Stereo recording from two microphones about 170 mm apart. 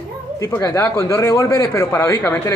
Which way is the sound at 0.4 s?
15° left (ahead or behind).